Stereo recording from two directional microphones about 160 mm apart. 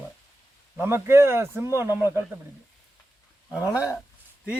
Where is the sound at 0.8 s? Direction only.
15° right (ahead or behind).